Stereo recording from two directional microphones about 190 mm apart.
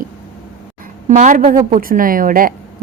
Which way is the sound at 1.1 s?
40° right (ahead or behind).